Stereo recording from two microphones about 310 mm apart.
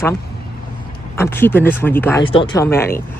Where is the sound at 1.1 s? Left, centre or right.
Centre.